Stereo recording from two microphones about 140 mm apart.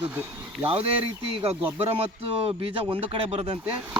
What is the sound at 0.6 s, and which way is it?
Speech, 40° right (ahead or behind).